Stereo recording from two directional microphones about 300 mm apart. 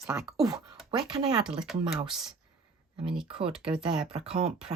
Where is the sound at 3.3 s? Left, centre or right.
Centre.